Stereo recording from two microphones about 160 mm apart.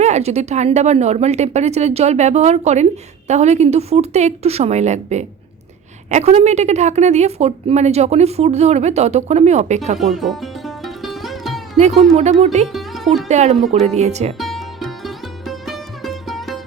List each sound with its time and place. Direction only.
0.0 s a woman's voice: 45° right (ahead or behind)
10.2 s music: centre (ahead or behind)
12.1 s a woman's voice: 45° right (ahead or behind)
12.6 s music: centre (ahead or behind)
13.2 s a woman's voice: 45° right (ahead or behind)
14.3 s music: centre (ahead or behind)